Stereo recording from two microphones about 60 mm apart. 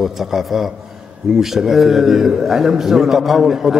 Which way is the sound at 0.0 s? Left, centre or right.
Centre.